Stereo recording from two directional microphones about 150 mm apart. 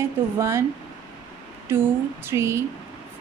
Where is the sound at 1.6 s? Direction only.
15° right (ahead or behind).